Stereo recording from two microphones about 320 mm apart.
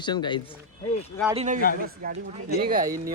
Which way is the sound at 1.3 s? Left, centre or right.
Right.